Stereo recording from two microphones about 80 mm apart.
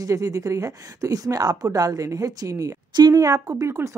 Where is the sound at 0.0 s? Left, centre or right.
Right.